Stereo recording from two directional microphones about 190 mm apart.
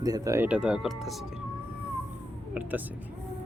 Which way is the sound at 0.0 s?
20° right (ahead or behind).